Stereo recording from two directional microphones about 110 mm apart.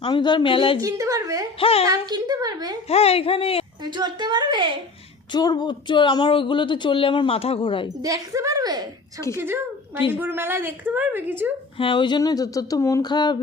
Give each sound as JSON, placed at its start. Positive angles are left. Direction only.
{"t": 0.0, "sound": "a woman's voice", "side_deg": 45}
{"t": 0.8, "sound": "a woman's voice", "side_deg": -30}
{"t": 1.5, "sound": "speech", "side_deg": 60}
{"t": 1.9, "sound": "a woman's voice", "side_deg": -40}
{"t": 2.9, "sound": "speech", "side_deg": 65}
{"t": 3.8, "sound": "a woman's voice", "side_deg": -40}
{"t": 5.3, "sound": "a woman's voice", "side_deg": 40}
{"t": 8.0, "sound": "a woman's voice", "side_deg": -30}
{"t": 10.1, "sound": "a woman's voice", "side_deg": -20}
{"t": 11.8, "sound": "speech", "side_deg": 50}